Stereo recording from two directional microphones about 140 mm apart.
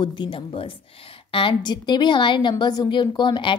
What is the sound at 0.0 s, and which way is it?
A woman's voice, 30° left (ahead or behind).